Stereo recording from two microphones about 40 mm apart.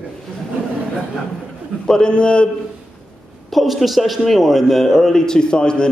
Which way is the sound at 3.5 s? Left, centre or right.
Centre.